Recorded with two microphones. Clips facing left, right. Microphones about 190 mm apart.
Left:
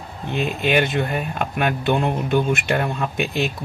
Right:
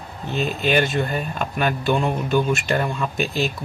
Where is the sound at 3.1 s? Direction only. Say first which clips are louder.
Even; 60° left (ahead or behind).